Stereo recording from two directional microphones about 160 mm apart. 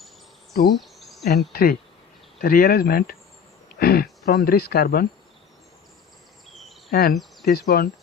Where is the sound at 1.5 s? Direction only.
70° left (ahead or behind).